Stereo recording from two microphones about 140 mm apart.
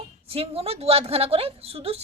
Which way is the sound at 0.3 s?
45° right (ahead or behind).